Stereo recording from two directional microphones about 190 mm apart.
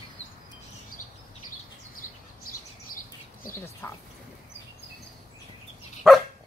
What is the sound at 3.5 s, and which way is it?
Speech, 15° left (ahead or behind).